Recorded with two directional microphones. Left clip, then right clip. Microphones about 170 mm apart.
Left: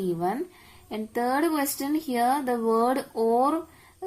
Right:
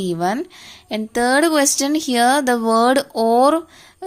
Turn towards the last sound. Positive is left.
turn(degrees=-50)  # may be behind; listen again after turning